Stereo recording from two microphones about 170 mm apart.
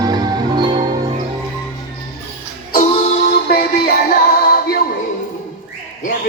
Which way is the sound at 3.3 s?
65° left (ahead or behind).